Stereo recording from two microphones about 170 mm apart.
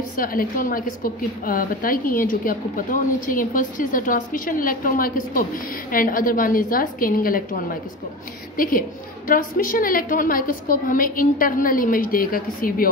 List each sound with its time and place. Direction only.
0.2 s a woman's voice: 55° left (ahead or behind)